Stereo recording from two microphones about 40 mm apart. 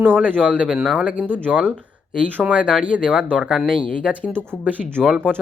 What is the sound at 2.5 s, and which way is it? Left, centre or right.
Speech, right.